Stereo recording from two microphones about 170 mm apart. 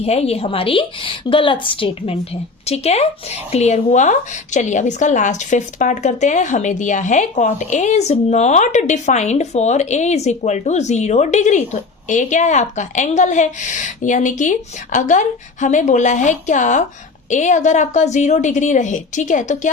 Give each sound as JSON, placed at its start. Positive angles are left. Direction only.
{"t": 0.0, "sound": "a woman's voice", "side_deg": 35}